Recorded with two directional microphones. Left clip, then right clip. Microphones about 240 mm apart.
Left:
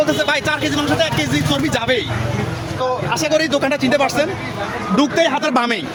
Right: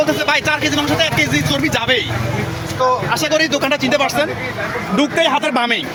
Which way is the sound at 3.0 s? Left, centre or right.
Centre.